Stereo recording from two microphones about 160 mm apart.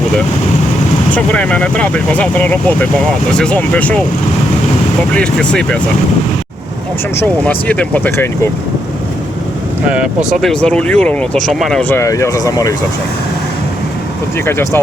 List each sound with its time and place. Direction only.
1.1 s speech: 10° left (ahead or behind)
5.1 s speech: 5° left (ahead or behind)
7.2 s speech: 10° left (ahead or behind)
9.9 s speech: centre (ahead or behind)
11.8 s speech: 15° left (ahead or behind)
14.3 s speech: 15° left (ahead or behind)